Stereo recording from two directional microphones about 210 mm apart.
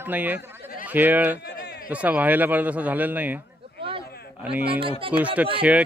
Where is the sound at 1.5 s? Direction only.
55° left (ahead or behind).